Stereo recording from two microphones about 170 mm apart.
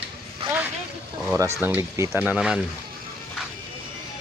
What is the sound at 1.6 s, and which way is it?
Speech, 10° right (ahead or behind).